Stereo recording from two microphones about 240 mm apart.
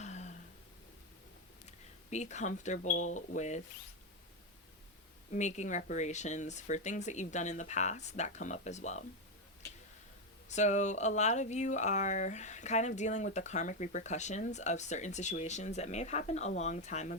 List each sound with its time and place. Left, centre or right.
0.0 s a sound: left
1.6 s speech: left
5.3 s speech: left
10.5 s speech: left